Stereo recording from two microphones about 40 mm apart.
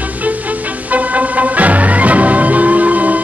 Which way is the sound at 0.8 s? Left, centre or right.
Right.